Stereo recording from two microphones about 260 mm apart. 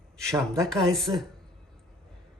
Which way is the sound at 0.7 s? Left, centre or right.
Centre.